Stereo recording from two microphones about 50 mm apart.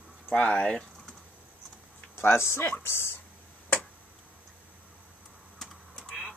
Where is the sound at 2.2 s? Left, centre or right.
Left.